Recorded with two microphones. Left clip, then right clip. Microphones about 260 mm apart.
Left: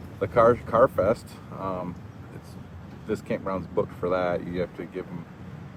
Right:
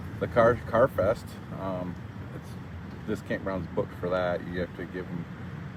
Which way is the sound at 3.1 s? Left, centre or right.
Left.